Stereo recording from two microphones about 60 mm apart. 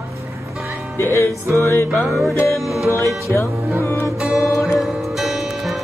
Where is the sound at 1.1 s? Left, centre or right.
Right.